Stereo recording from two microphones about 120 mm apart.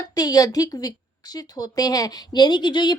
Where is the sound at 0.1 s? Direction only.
30° left (ahead or behind).